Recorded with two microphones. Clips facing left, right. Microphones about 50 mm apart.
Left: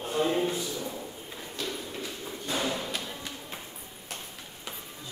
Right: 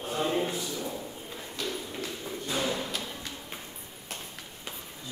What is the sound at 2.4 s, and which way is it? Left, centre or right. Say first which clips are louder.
Thump: even; centre.